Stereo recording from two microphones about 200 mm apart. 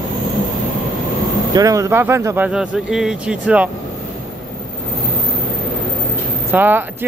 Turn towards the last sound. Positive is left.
turn(degrees=-10)  # may be behind; listen again after turning